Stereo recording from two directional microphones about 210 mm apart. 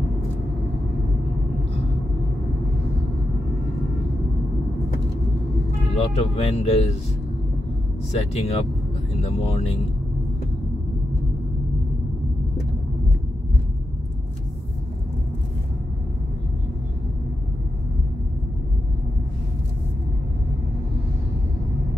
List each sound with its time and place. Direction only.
5.9 s speech: 30° left (ahead or behind)
8.1 s speech: 30° left (ahead or behind)